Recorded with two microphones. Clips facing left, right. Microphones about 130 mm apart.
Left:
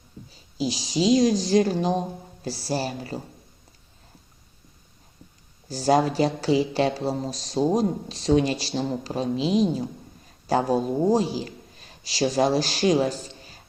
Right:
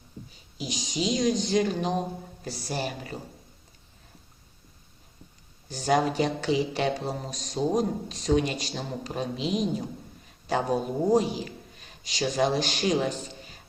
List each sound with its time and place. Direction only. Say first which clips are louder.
0.5 s speech: left 7 dB; 30° left (ahead or behind)
5.6 s speech: left 4 dB; 35° left (ahead or behind)